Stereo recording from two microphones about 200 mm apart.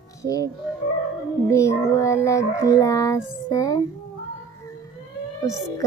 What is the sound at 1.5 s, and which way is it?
Speech, 15° left (ahead or behind).